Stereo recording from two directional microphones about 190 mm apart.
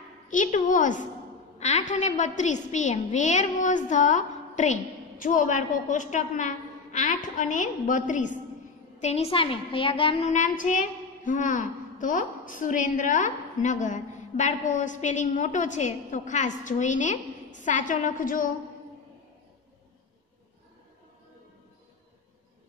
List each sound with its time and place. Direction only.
0.3 s a woman's voice: 40° left (ahead or behind)
10.3 s a woman's voice: 40° left (ahead or behind)